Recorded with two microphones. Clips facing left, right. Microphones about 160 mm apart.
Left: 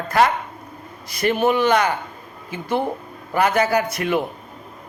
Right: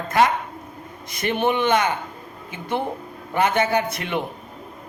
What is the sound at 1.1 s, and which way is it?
Speech, 20° right (ahead or behind).